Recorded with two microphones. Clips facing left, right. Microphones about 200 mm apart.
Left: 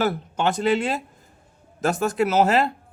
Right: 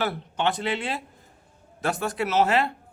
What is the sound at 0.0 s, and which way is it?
Speech, 45° left (ahead or behind).